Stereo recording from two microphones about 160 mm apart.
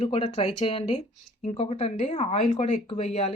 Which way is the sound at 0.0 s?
35° left (ahead or behind).